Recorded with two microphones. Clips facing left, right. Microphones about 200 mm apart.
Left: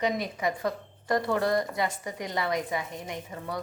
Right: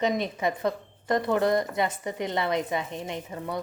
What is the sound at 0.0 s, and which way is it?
A woman's voice, 25° right (ahead or behind).